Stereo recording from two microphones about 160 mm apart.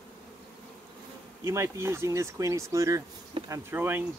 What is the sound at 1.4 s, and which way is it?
Speech, 15° right (ahead or behind).